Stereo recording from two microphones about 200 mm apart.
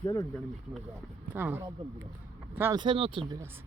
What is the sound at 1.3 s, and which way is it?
Speech, 10° right (ahead or behind).